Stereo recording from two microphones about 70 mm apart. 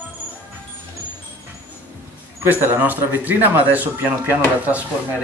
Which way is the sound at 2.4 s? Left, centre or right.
Right.